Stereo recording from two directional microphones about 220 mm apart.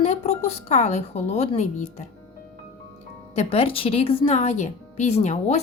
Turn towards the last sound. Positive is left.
turn(degrees=30)  # may be behind; listen again after turning